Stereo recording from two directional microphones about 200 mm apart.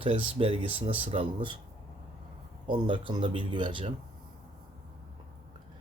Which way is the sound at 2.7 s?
25° right (ahead or behind).